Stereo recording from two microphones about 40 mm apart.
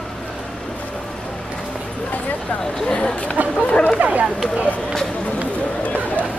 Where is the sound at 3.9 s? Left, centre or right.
Right.